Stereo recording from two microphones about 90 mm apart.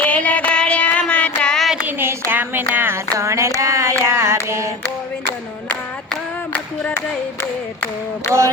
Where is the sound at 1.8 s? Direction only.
25° right (ahead or behind).